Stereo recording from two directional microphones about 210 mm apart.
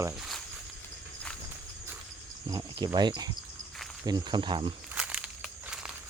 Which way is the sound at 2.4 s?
20° right (ahead or behind).